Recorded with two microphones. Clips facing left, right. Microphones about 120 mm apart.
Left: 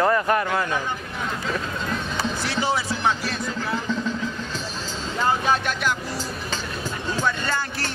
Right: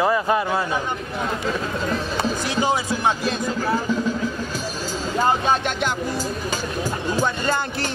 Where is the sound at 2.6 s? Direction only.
20° right (ahead or behind).